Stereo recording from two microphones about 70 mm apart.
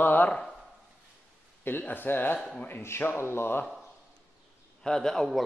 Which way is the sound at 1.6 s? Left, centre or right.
Left.